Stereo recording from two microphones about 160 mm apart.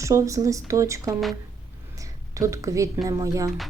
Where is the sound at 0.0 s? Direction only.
20° right (ahead or behind).